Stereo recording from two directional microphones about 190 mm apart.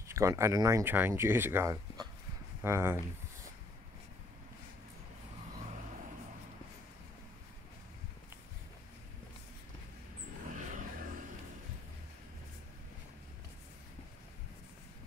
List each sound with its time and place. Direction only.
0.1 s speech: 15° right (ahead or behind)
10.5 s vehicle: 40° right (ahead or behind)